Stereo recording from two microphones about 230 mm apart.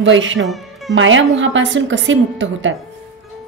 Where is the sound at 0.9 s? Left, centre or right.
Right.